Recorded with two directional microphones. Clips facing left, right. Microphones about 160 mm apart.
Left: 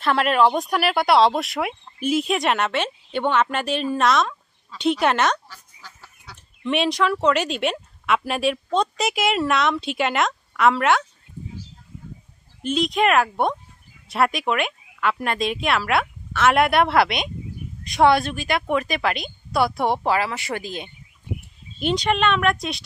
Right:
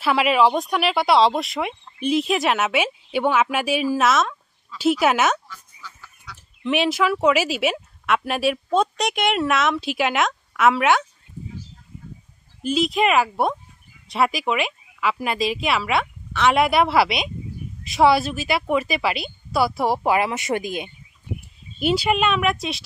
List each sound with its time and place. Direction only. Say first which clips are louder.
0.0 s speech: right 1 dB; 5° right (ahead or behind)
5.9 s duck: right 1 dB; 30° left (ahead or behind)
6.6 s speech: right 1 dB; centre (ahead or behind)
12.6 s speech: even; 5° right (ahead or behind)
20.1 s speech: right 2 dB; 20° right (ahead or behind); by 22.8 s centre (ahead or behind)